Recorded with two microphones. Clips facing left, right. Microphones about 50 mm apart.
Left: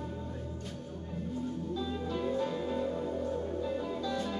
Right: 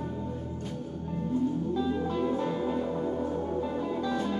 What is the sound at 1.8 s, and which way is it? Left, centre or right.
Music, right.